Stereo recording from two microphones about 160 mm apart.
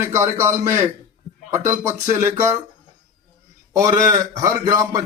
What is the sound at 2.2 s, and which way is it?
Speech, 20° right (ahead or behind).